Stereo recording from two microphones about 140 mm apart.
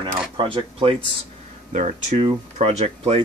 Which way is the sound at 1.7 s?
55° right (ahead or behind).